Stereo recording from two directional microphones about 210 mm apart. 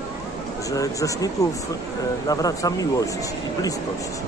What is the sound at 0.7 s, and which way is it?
Speech, 15° left (ahead or behind).